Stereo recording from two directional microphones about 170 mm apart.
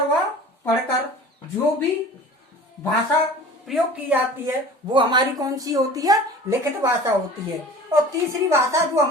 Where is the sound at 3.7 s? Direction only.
5° right (ahead or behind).